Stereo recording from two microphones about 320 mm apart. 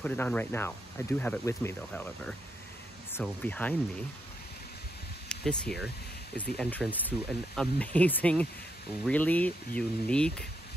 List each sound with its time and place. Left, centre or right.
0.0 s speech: centre
5.3 s speech: centre